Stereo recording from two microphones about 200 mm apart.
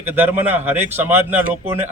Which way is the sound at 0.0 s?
10° right (ahead or behind).